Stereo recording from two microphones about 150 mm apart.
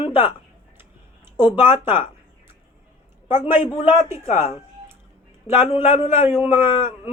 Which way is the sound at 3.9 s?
20° right (ahead or behind).